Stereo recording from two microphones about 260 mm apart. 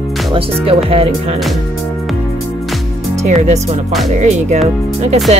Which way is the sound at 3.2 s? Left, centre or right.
Right.